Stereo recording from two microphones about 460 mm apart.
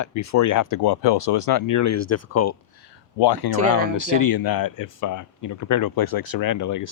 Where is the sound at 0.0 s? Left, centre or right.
Left.